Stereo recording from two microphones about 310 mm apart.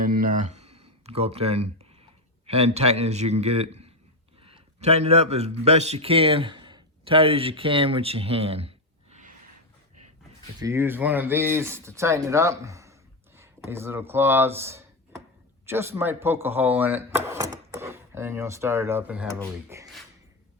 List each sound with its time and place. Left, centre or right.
0.0 s a sound: right
2.5 s a man's voice: centre
10.6 s speech: centre